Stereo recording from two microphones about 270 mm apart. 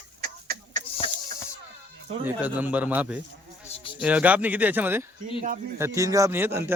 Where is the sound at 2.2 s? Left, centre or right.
Centre.